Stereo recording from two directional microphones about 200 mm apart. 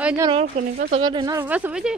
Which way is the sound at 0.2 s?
30° right (ahead or behind).